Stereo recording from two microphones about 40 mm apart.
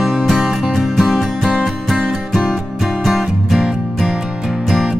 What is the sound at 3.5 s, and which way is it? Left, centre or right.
Music, centre.